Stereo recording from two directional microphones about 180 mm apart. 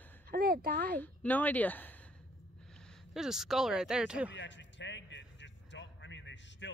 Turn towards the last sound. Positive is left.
turn(degrees=90)